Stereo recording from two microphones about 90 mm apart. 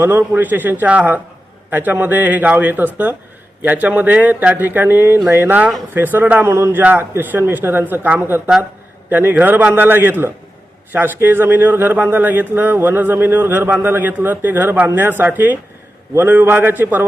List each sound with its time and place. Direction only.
0.0 s speech: 25° right (ahead or behind)
6.5 s a man's voice: 30° right (ahead or behind)